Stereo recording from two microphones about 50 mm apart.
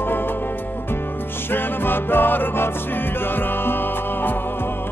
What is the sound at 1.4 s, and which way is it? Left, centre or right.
Music, left.